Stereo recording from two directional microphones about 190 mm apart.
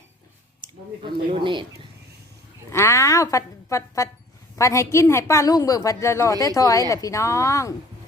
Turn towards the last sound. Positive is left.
turn(degrees=15)  # may be behind; listen again after turning